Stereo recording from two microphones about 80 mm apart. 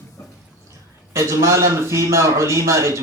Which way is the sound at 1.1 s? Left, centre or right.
Right.